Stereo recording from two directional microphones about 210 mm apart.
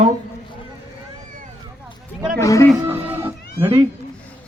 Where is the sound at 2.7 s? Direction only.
10° right (ahead or behind).